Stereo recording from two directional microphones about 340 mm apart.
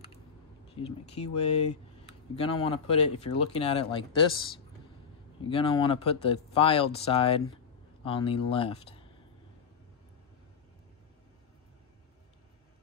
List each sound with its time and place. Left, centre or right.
0.8 s speech: centre
5.5 s speech: centre